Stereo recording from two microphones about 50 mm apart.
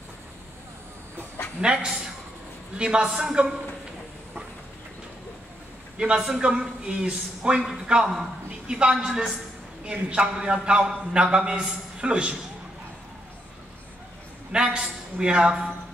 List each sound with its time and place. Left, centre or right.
1.6 s a man's voice: centre
3.1 s a man's voice: centre
5.9 s a man's voice: centre
14.5 s a man's voice: centre